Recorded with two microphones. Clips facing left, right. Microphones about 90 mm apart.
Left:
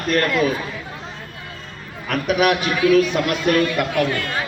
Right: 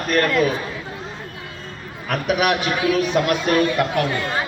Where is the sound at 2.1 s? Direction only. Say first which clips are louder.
Left 1 dB; 30° right (ahead or behind).